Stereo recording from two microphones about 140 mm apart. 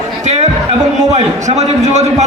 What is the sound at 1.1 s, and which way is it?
Speech, 50° right (ahead or behind).